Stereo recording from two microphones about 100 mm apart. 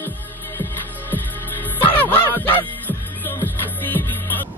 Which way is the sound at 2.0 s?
20° left (ahead or behind).